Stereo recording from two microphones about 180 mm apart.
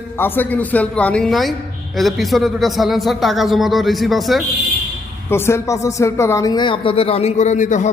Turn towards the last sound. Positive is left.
turn(degrees=45)  # may be behind; listen again after turning